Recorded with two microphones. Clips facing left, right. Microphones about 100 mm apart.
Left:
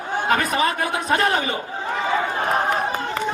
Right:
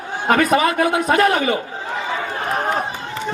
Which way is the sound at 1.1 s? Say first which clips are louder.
Right 3 dB; 30° left (ahead or behind).